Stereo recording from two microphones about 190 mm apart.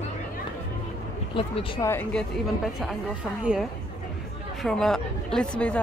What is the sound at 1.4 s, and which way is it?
Speech, 25° left (ahead or behind).